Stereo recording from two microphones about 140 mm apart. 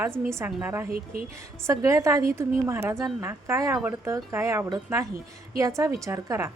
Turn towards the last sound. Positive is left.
turn(degrees=-20)  # may be behind; listen again after turning